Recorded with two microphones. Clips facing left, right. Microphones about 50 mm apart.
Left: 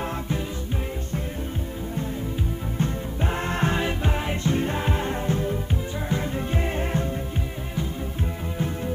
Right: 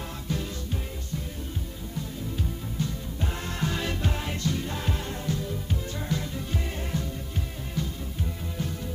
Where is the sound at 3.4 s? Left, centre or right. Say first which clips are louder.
Left 6 dB; left.